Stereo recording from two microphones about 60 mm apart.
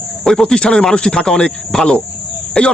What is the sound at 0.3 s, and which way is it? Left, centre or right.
Speech, centre.